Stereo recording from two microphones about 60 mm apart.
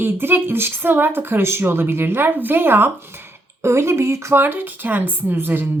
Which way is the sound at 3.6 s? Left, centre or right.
Right.